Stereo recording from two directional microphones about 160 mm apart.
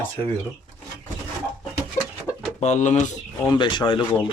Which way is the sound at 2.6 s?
45° left (ahead or behind).